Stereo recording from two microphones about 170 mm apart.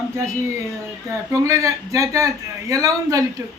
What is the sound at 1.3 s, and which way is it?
A man's voice, 20° right (ahead or behind).